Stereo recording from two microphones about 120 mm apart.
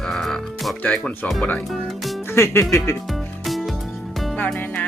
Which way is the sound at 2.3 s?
20° left (ahead or behind).